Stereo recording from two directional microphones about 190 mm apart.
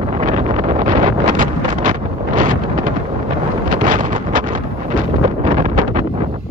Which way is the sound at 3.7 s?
45° right (ahead or behind).